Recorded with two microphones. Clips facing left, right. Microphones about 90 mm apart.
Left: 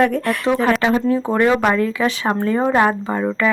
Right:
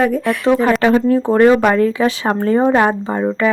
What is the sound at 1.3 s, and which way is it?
A woman's voice, 35° right (ahead or behind).